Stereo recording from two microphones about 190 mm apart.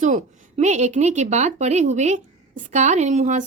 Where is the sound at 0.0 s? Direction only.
40° right (ahead or behind).